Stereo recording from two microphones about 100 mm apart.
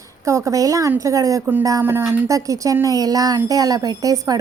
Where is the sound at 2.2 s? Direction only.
35° right (ahead or behind).